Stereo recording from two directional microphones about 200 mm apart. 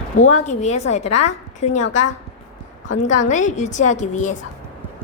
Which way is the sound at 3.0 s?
35° left (ahead or behind).